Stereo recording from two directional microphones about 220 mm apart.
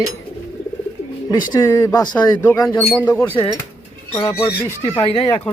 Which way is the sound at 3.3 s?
25° left (ahead or behind).